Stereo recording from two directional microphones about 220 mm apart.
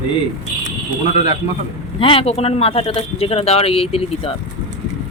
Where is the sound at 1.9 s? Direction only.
25° left (ahead or behind).